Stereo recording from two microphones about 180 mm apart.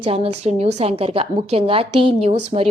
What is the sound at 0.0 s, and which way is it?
A woman's voice, 35° right (ahead or behind).